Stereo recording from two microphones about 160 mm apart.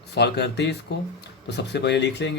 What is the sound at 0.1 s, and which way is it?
Speech, 90° left.